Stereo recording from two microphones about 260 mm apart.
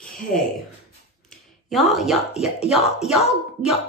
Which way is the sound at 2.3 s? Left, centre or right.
Left.